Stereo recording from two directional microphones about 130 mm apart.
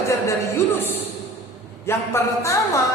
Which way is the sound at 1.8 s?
20° left (ahead or behind).